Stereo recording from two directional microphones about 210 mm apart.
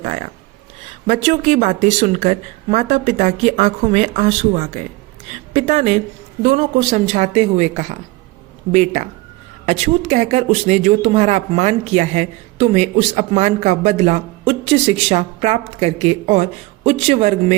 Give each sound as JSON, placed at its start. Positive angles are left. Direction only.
{"t": 0.0, "sound": "speech", "side_deg": -35}